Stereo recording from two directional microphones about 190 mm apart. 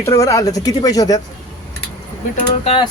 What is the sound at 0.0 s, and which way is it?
Speech, 15° left (ahead or behind).